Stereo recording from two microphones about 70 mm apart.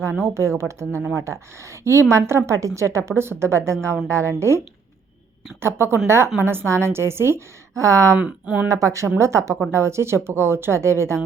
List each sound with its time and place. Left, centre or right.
0.0 s a woman's voice: right
7.7 s a woman's voice: right
8.2 s speech: centre
8.6 s a woman's voice: right